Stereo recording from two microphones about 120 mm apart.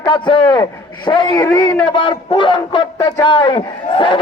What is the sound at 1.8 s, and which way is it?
A man's voice, 45° left (ahead or behind).